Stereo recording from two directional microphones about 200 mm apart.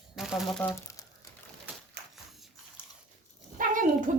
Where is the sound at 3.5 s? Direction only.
45° right (ahead or behind).